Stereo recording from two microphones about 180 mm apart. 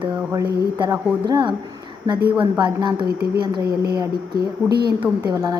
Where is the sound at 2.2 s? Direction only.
10° right (ahead or behind).